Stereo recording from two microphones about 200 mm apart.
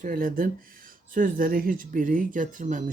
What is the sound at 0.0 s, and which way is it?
Speech, 45° right (ahead or behind).